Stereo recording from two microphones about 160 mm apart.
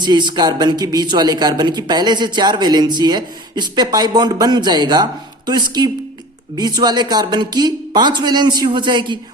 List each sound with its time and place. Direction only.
0.0 s a man's voice: 30° right (ahead or behind)
6.6 s a man's voice: 25° right (ahead or behind)